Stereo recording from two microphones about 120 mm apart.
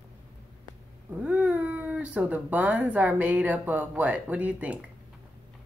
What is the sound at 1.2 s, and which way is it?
Speech, 10° right (ahead or behind).